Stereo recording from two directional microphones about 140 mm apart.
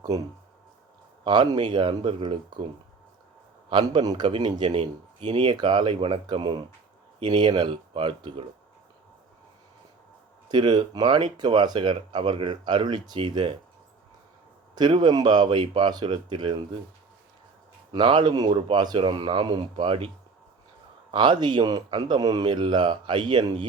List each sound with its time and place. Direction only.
0.1 s speech: 25° right (ahead or behind); by 2.6 s 40° right (ahead or behind)
3.7 s speech: 35° right (ahead or behind)
10.5 s speech: 35° right (ahead or behind)
14.8 s speech: 30° right (ahead or behind)
17.9 s speech: 35° right (ahead or behind)
21.1 s speech: 35° right (ahead or behind)